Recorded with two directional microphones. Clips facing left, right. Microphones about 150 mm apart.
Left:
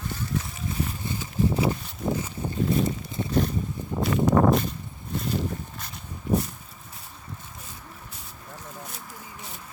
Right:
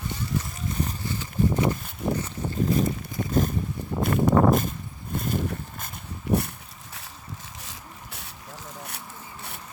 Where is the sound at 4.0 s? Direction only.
50° right (ahead or behind).